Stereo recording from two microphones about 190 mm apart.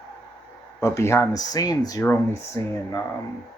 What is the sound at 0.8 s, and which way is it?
Speech, 15° left (ahead or behind).